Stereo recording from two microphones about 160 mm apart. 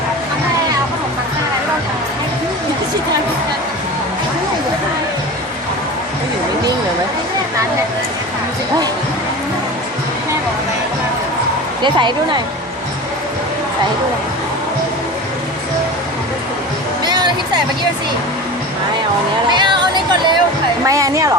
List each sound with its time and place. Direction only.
11.8 s speech: 30° right (ahead or behind)
17.0 s a sound: 25° right (ahead or behind)
19.5 s music: 30° right (ahead or behind)
20.8 s speech: 20° right (ahead or behind)